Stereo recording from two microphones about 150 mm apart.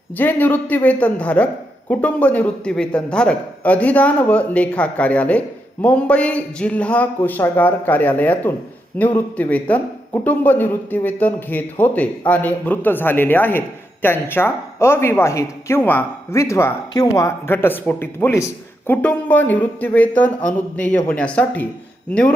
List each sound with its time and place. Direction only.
0.2 s a man's voice: 10° left (ahead or behind)